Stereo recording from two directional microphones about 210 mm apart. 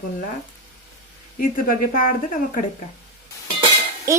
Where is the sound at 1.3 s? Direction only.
40° left (ahead or behind).